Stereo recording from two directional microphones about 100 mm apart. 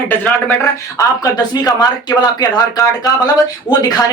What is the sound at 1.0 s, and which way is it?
Speech, 40° left (ahead or behind).